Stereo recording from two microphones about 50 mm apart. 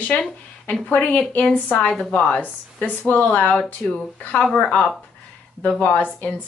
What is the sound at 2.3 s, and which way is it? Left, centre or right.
Speech, left.